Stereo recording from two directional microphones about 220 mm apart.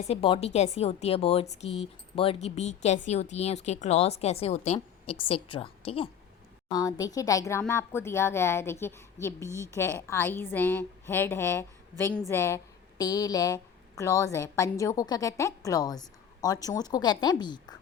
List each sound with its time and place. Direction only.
0.1 s a woman's voice: 25° left (ahead or behind)